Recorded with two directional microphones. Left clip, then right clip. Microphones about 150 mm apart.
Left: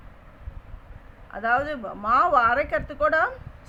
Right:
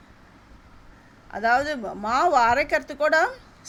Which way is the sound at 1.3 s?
30° right (ahead or behind).